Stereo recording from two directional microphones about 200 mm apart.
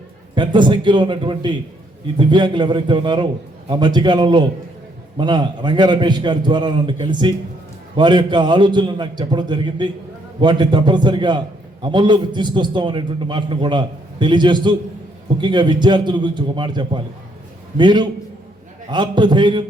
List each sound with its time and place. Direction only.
0.3 s a man's voice: 25° right (ahead or behind)